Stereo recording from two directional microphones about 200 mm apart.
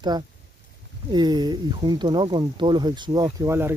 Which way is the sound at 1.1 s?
20° right (ahead or behind).